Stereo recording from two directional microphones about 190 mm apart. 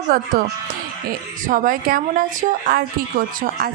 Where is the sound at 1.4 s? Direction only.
45° right (ahead or behind).